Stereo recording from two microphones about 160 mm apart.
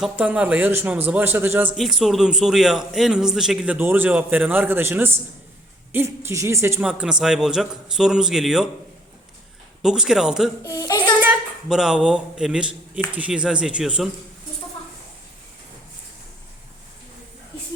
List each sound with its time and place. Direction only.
0.0 s a man's voice: 10° right (ahead or behind)
1.7 s a man's voice: centre (ahead or behind)
6.8 s a man's voice: 5° right (ahead or behind)
9.8 s a man's voice: 5° right (ahead or behind)
10.6 s speech: 20° left (ahead or behind)
11.2 s a man's voice: 5° right (ahead or behind)